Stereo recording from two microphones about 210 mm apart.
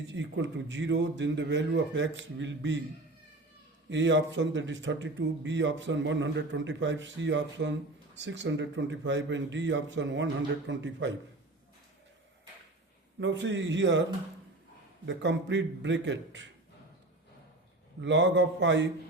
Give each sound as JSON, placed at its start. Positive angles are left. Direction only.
{"t": 0.0, "sound": "speech", "side_deg": -60}
{"t": 3.8, "sound": "speech", "side_deg": -60}
{"t": 13.1, "sound": "speech", "side_deg": -60}
{"t": 15.0, "sound": "speech", "side_deg": -60}
{"t": 18.0, "sound": "speech", "side_deg": -60}